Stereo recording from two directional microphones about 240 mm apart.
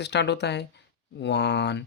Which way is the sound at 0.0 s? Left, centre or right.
Left.